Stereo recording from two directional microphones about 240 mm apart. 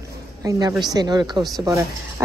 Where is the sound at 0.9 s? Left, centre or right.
Centre.